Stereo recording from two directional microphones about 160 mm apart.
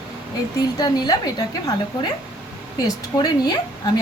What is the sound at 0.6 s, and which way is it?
A woman's voice, 25° left (ahead or behind).